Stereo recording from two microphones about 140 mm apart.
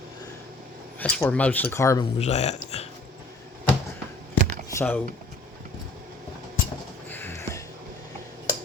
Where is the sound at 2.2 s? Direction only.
50° left (ahead or behind).